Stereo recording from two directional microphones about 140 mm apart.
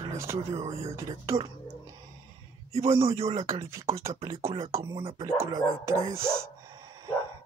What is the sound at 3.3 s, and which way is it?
Speech, 25° right (ahead or behind).